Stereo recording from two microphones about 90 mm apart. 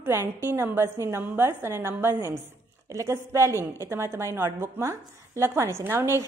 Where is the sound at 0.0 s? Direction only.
30° right (ahead or behind).